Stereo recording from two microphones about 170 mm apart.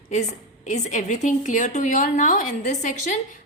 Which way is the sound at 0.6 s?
45° left (ahead or behind).